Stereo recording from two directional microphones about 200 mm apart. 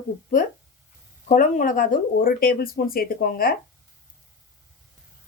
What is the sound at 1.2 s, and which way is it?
Speech, 40° left (ahead or behind).